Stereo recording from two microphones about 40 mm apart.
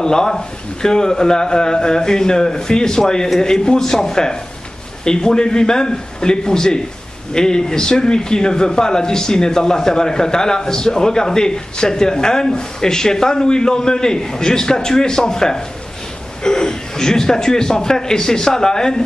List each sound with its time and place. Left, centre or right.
0.0 s a man's voice: centre